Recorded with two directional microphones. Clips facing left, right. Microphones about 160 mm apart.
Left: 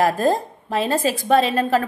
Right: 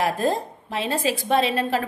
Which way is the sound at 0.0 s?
45° left (ahead or behind).